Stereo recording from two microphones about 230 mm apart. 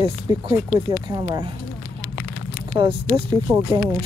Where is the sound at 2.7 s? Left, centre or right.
Right.